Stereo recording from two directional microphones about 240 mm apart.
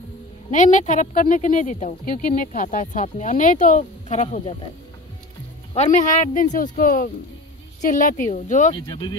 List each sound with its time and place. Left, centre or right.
0.5 s speech: left
5.8 s speech: left